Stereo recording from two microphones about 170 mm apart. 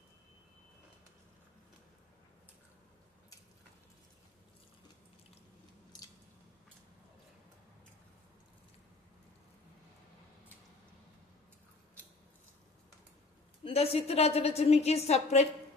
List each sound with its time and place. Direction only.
5.9 s scissors: 25° left (ahead or behind)
13.7 s a woman's voice: 35° left (ahead or behind)